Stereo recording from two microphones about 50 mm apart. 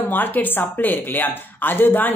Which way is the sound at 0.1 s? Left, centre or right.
Left.